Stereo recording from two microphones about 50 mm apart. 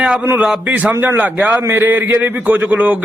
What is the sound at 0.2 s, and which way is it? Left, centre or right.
Speech, right.